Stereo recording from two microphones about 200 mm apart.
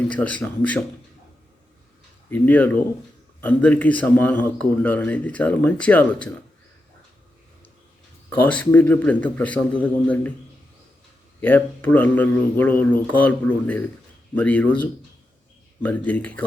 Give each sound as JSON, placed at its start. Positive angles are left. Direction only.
{"t": 0.1, "sound": "speech", "side_deg": 5}
{"t": 2.3, "sound": "speech", "side_deg": 10}
{"t": 8.3, "sound": "speech", "side_deg": 5}
{"t": 11.3, "sound": "speech", "side_deg": 10}